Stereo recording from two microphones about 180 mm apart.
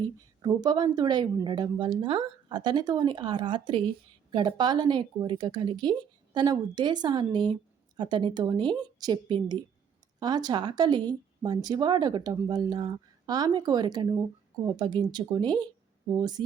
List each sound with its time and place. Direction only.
0.4 s speech: 25° right (ahead or behind)